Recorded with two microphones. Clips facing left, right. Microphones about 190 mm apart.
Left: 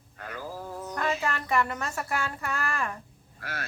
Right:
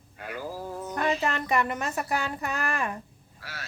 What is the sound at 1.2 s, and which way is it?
Speech, 20° right (ahead or behind).